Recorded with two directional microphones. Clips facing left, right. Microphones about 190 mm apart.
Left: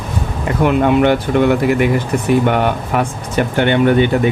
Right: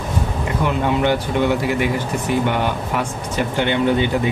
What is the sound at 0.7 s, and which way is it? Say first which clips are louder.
Speech: left 7 dB; 60° left (ahead or behind).